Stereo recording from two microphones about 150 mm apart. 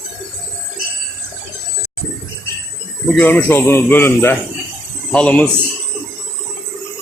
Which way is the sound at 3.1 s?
10° left (ahead or behind).